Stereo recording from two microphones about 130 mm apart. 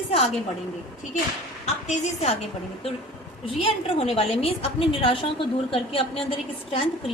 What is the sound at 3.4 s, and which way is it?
A woman's voice, 50° left (ahead or behind).